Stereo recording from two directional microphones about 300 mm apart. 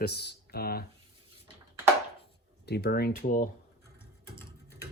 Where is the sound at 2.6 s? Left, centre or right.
Left.